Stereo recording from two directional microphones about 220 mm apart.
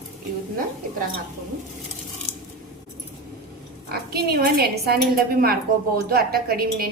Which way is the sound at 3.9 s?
45° right (ahead or behind).